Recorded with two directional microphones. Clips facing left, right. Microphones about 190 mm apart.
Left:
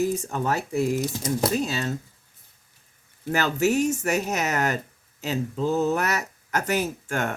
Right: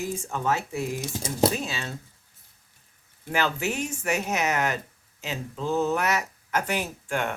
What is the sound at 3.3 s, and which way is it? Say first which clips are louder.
Speech: left 5 dB; 40° left (ahead or behind).